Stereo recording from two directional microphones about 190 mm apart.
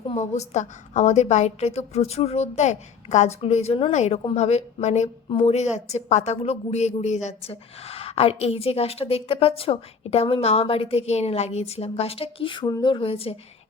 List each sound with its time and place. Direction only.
0.0 s a woman's voice: 30° left (ahead or behind)